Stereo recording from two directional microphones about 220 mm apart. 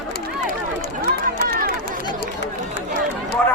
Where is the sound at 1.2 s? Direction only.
40° right (ahead or behind).